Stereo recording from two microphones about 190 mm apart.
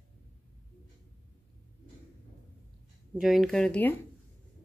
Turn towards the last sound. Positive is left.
turn(degrees=5)  # may be behind; listen again after turning